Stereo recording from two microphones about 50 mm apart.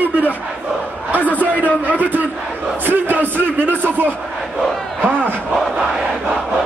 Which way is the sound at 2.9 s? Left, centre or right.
Right.